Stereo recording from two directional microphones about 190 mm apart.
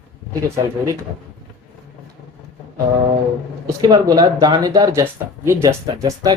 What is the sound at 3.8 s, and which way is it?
Speech, 20° right (ahead or behind).